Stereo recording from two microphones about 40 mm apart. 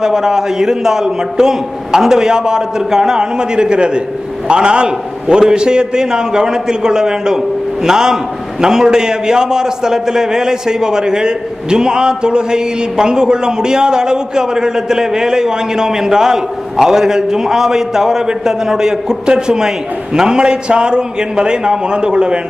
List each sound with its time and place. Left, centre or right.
0.0 s a man's voice: centre